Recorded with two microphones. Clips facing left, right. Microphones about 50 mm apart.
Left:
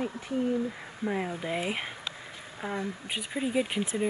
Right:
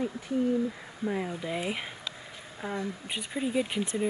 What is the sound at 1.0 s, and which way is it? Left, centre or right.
Speech, centre.